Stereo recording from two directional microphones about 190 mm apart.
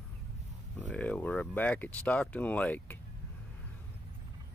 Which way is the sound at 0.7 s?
5° left (ahead or behind).